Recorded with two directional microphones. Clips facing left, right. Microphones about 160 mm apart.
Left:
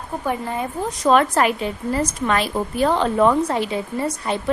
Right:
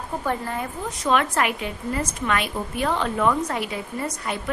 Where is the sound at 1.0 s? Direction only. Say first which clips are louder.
Left 5 dB; 35° left (ahead or behind).